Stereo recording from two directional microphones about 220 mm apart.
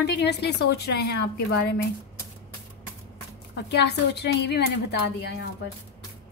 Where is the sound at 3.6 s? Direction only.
50° left (ahead or behind).